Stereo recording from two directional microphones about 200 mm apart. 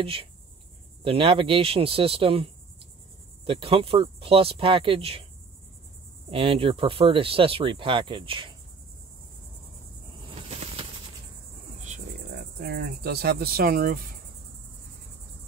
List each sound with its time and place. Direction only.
0.0 s speech: 25° right (ahead or behind)
3.4 s speech: 25° right (ahead or behind)
6.3 s speech: 25° right (ahead or behind)
10.5 s a sound: 25° right (ahead or behind)
12.5 s cricket: 50° right (ahead or behind)